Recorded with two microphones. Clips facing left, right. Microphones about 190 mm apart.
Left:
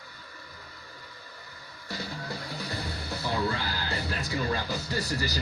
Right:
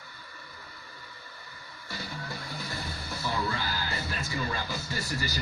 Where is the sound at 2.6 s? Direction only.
35° left (ahead or behind).